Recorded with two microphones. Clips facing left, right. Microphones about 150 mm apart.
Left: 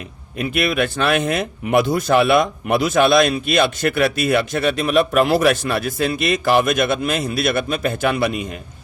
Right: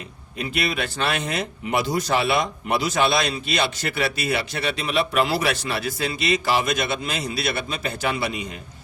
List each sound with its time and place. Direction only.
0.3 s speech: 55° left (ahead or behind)